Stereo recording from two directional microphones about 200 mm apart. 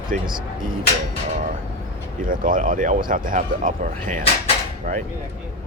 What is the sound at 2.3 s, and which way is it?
Speech, 40° right (ahead or behind).